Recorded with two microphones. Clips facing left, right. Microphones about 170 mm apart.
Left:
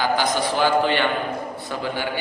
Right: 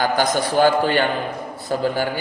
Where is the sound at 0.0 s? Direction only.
45° right (ahead or behind).